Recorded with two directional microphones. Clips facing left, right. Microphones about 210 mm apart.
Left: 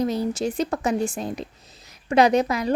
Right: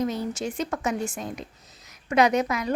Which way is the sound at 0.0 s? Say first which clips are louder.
Left 4 dB; 35° left (ahead or behind).